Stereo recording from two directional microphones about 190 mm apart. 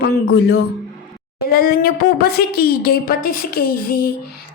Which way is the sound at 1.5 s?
50° left (ahead or behind).